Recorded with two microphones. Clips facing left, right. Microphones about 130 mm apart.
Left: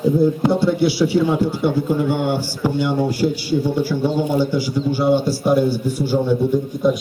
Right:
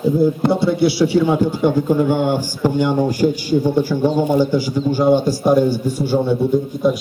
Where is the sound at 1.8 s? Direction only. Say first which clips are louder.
Right 3 dB; 45° right (ahead or behind).